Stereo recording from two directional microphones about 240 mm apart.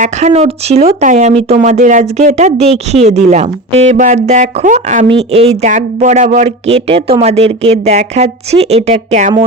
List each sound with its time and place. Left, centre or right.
0.0 s speech: right